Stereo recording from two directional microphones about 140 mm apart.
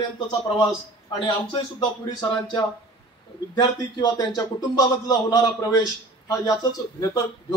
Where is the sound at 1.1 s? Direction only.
30° left (ahead or behind).